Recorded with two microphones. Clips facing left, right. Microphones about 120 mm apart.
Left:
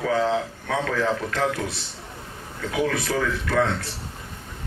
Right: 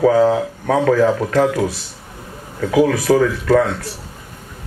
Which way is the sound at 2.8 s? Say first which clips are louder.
Right 10 dB; 45° right (ahead or behind).